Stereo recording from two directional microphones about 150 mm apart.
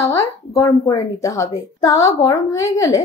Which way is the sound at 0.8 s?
25° left (ahead or behind).